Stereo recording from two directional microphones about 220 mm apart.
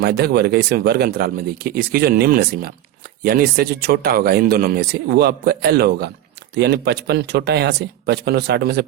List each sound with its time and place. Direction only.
0.0 s speech: 45° right (ahead or behind)